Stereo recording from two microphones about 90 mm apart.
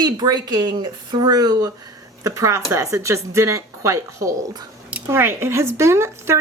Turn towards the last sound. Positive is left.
turn(degrees=-30)  # may be behind; listen again after turning